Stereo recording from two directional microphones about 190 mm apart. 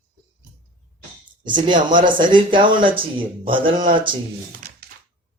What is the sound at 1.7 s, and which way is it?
Speech, 45° right (ahead or behind).